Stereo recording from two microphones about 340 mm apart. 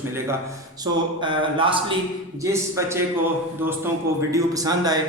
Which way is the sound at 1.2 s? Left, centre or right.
Centre.